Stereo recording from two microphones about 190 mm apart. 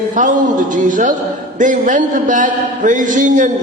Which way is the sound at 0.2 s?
40° right (ahead or behind).